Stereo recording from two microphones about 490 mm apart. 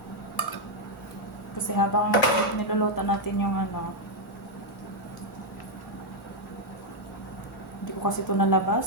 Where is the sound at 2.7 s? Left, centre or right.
Left.